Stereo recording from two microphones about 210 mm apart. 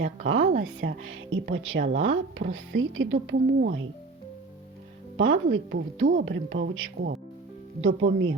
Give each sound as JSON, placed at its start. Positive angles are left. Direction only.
{"t": 0.3, "sound": "speech", "side_deg": -70}
{"t": 5.1, "sound": "speech", "side_deg": -65}